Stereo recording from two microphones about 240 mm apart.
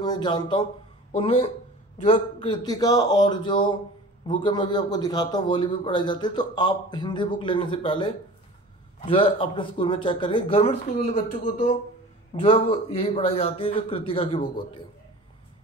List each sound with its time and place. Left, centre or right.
0.0 s a man's voice: centre
12.4 s a man's voice: left